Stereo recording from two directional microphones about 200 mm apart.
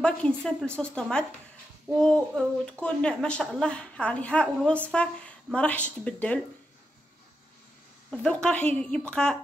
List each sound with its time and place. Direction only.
0.0 s a woman's voice: 5° left (ahead or behind)
8.1 s a woman's voice: 5° left (ahead or behind)